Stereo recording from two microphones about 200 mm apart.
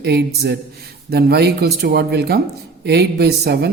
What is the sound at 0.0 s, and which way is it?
A man's voice, 55° right (ahead or behind).